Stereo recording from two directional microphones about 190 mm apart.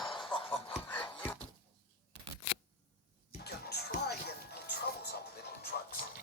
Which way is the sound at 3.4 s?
55° left (ahead or behind).